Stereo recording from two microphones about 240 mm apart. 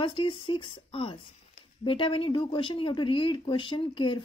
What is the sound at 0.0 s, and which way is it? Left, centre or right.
Speech, left.